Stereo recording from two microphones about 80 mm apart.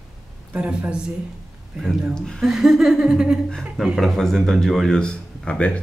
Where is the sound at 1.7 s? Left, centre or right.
Centre.